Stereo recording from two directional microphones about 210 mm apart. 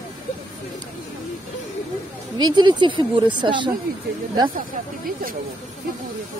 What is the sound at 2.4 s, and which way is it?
Speech, 20° right (ahead or behind).